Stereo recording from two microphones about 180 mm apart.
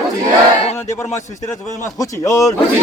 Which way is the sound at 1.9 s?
15° left (ahead or behind).